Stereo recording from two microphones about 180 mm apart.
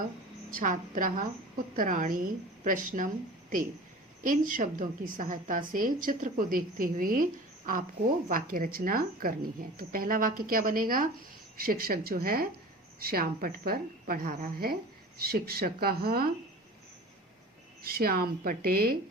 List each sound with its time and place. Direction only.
0.5 s a woman's voice: 50° right (ahead or behind)
4.2 s a woman's voice: 50° right (ahead or behind)
8.3 s a woman's voice: 50° right (ahead or behind)
17.8 s a woman's voice: 55° right (ahead or behind)